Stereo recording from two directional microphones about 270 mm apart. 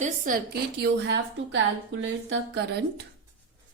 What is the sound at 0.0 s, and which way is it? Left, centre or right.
A woman's voice, right.